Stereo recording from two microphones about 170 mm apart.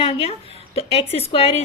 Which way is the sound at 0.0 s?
35° left (ahead or behind).